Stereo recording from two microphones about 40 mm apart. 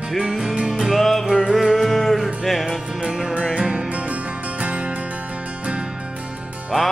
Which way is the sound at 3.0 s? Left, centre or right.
Centre.